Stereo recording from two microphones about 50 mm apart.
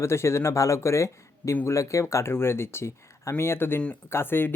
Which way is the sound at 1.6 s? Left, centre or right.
Left.